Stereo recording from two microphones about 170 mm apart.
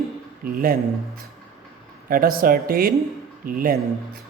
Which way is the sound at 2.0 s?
55° right (ahead or behind).